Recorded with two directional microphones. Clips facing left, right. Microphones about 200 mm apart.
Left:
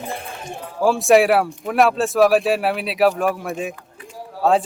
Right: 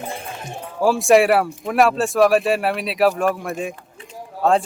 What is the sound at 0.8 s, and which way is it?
Speech, centre (ahead or behind).